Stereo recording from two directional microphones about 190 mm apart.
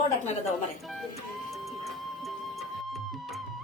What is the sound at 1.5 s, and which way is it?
Music, centre (ahead or behind).